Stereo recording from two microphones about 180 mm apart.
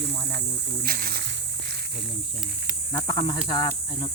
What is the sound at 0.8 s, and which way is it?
Speech, 55° right (ahead or behind).